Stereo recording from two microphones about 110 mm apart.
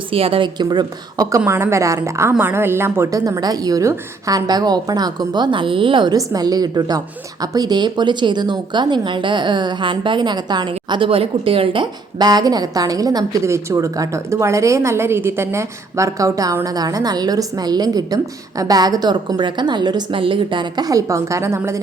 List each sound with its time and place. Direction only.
0.1 s a woman's voice: 55° right (ahead or behind); by 1.4 s 35° right (ahead or behind)
1.5 s a woman's voice: 25° right (ahead or behind); by 6.1 s 50° right (ahead or behind)
6.1 s a woman's voice: 35° right (ahead or behind)